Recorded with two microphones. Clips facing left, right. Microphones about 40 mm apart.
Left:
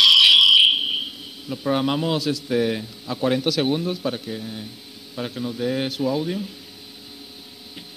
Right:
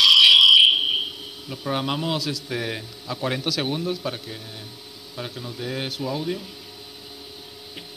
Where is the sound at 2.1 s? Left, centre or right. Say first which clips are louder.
Left 4 dB; left.